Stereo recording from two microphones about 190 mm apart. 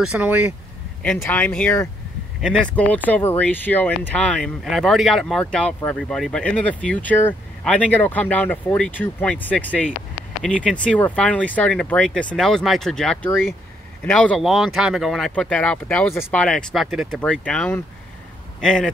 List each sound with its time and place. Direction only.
0.0 s speech: 5° right (ahead or behind)
1.0 s speech: 5° left (ahead or behind)